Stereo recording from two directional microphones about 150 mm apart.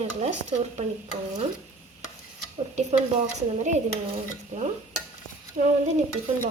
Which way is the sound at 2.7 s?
50° right (ahead or behind).